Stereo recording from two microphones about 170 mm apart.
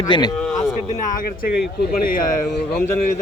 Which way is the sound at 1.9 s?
55° left (ahead or behind).